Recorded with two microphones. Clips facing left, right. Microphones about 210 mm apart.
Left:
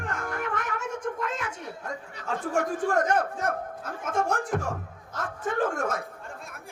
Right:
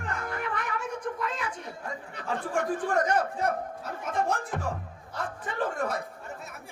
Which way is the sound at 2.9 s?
50° left (ahead or behind).